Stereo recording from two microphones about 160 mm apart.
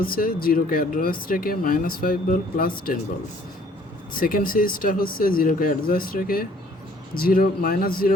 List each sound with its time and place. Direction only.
0.0 s speech: 65° left (ahead or behind)
4.2 s speech: 65° left (ahead or behind)